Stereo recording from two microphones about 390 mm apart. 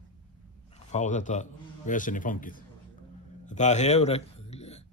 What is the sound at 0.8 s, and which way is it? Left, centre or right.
A man's voice, centre.